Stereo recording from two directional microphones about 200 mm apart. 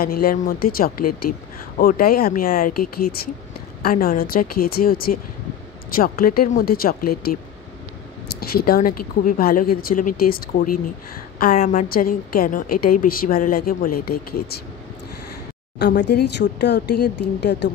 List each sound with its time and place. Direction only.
0.0 s a woman's voice: 45° left (ahead or behind)
15.8 s speech: 55° left (ahead or behind)